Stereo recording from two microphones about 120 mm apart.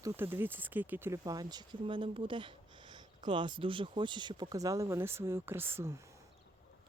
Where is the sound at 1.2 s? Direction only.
35° right (ahead or behind).